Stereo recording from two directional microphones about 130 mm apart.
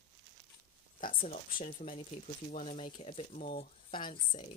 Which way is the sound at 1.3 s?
75° left (ahead or behind).